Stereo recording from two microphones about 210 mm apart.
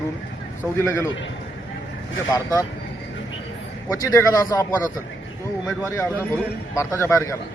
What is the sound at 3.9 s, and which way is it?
A man's voice, 15° left (ahead or behind).